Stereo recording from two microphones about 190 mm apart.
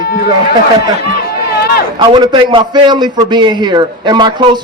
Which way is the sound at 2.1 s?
25° right (ahead or behind).